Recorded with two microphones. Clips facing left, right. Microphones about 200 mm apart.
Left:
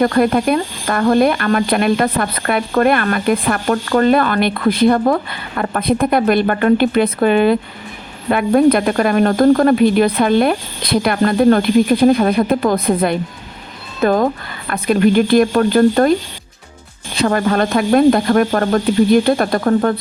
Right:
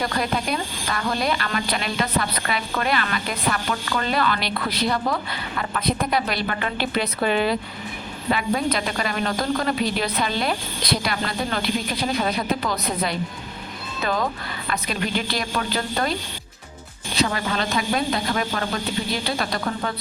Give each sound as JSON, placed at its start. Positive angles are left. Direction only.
{"t": 0.0, "sound": "speech", "side_deg": 55}
{"t": 17.2, "sound": "speech", "side_deg": 55}